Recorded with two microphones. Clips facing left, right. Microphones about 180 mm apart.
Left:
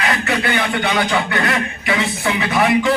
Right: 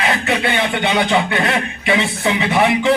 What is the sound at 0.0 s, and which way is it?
A man's voice, 25° right (ahead or behind).